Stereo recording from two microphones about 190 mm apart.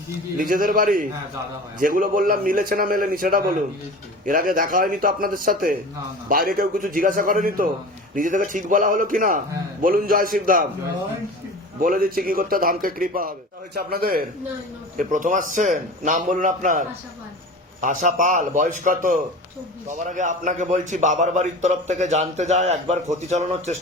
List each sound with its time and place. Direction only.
0.3 s a man's voice: 50° right (ahead or behind)
11.8 s a man's voice: 50° right (ahead or behind)